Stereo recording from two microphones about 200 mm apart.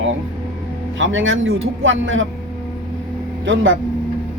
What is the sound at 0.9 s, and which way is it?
Speech, 70° right (ahead or behind).